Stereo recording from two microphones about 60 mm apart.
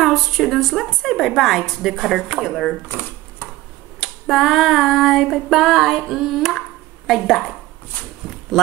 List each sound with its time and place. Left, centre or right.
0.0 s a woman's voice: centre
2.9 s shuffling cards: left
4.0 s a woman's voice: centre